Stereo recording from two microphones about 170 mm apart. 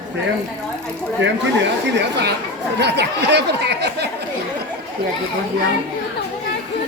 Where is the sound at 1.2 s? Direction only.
90° right.